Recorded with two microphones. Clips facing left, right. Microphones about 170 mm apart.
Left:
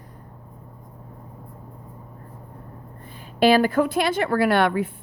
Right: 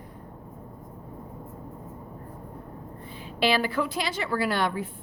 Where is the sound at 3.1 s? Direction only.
50° left (ahead or behind); by 4.9 s 65° left (ahead or behind).